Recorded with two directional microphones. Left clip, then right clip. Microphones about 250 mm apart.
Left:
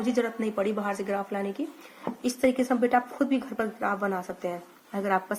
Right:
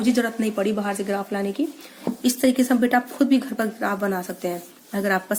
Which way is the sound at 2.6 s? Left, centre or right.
Right.